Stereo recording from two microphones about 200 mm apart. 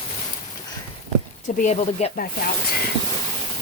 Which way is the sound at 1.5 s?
35° left (ahead or behind).